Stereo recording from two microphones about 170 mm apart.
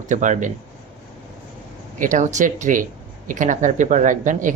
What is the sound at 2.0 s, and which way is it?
Speech, 50° right (ahead or behind).